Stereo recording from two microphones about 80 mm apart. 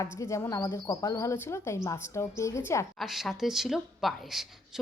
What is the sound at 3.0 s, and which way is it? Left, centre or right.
Speech, centre.